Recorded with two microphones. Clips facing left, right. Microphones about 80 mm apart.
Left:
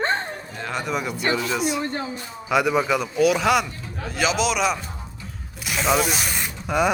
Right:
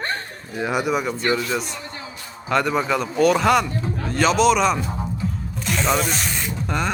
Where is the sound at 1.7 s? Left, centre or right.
Left.